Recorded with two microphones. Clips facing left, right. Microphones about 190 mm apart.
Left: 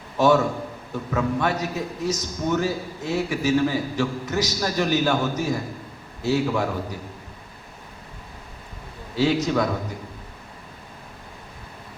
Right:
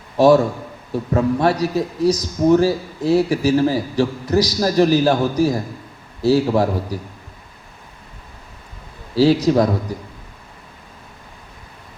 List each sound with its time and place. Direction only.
0.2 s a man's voice: 35° right (ahead or behind)
9.1 s a man's voice: 35° right (ahead or behind)